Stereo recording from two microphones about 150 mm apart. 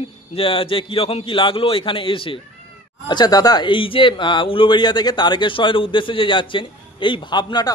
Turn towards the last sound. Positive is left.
turn(degrees=30)  # may be behind; listen again after turning